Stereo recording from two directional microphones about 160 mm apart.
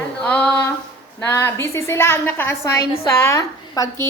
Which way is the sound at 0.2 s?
10° left (ahead or behind).